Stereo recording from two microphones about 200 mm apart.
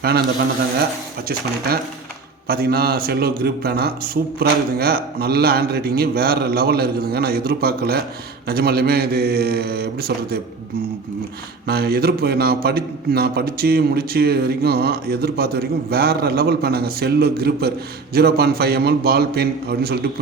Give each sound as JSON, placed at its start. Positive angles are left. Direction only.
{"t": 2.5, "sound": "a man's voice", "side_deg": -50}
{"t": 11.6, "sound": "a man's voice", "side_deg": -50}